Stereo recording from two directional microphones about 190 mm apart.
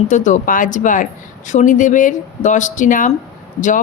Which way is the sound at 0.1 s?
40° left (ahead or behind).